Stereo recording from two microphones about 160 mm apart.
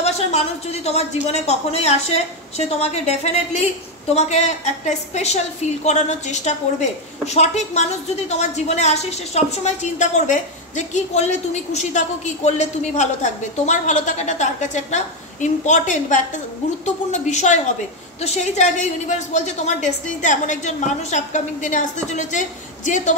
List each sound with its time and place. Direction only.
0.0 s a woman's voice: 40° left (ahead or behind)